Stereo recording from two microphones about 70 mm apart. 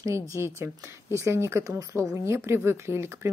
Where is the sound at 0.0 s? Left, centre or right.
Right.